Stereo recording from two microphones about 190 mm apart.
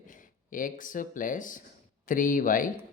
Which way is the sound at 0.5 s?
45° left (ahead or behind).